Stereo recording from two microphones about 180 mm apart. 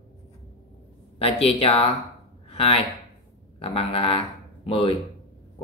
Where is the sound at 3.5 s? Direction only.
30° left (ahead or behind).